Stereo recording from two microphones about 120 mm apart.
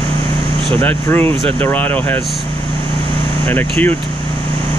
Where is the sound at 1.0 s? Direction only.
15° left (ahead or behind).